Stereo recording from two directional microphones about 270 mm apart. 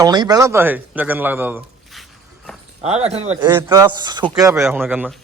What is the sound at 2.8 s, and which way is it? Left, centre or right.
A man's voice, right.